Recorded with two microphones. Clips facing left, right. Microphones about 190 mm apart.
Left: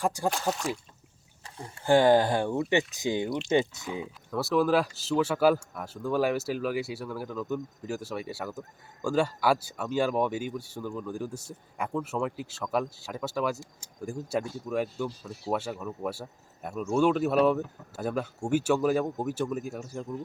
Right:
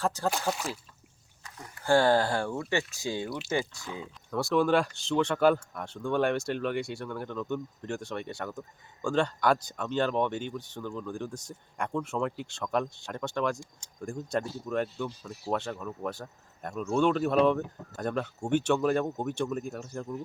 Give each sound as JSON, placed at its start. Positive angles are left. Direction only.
{"t": 0.0, "sound": "speech", "side_deg": 15}
{"t": 0.4, "sound": "speech", "side_deg": 0}
{"t": 1.5, "sound": "speech", "side_deg": 30}
{"t": 1.9, "sound": "speech", "side_deg": 15}
{"t": 4.3, "sound": "speech", "side_deg": 0}